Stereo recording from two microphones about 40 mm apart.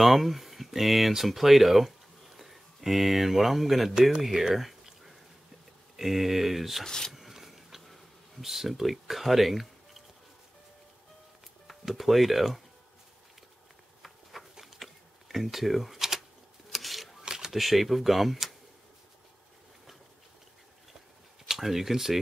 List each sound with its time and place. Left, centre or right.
0.0 s speech: centre
4.3 s a sound: centre
5.9 s speech: centre
6.8 s speech: centre
7.1 s insect: centre
11.6 s speech: centre
14.5 s a sound: centre
17.2 s camera: centre
17.5 s speech: centre
21.5 s speech: centre